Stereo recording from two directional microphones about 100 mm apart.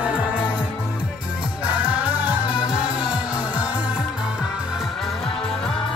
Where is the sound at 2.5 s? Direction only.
45° left (ahead or behind).